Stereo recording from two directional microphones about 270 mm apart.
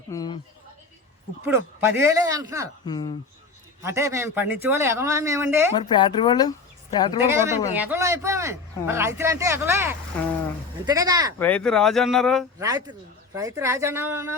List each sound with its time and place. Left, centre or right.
0.1 s a sound: centre
1.5 s speech: centre
2.8 s speech: centre
3.8 s speech: centre
5.7 s speech: centre
7.8 s speech: centre
11.3 s speech: centre
12.5 s speech: centre